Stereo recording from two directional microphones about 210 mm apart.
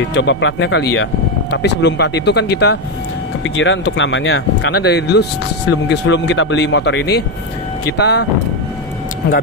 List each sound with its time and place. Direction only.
0.1 s speech: 60° left (ahead or behind)